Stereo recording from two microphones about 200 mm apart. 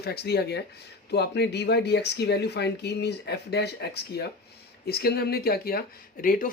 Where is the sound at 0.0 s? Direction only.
55° left (ahead or behind).